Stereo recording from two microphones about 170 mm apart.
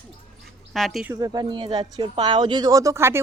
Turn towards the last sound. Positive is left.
turn(degrees=-15)  # may be behind; listen again after turning